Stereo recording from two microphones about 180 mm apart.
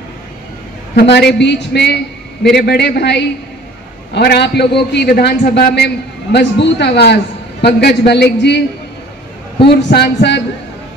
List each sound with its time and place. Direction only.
0.9 s a man's voice: 70° left (ahead or behind)
5.5 s a man's voice: 70° left (ahead or behind)
9.7 s a man's voice: 70° left (ahead or behind)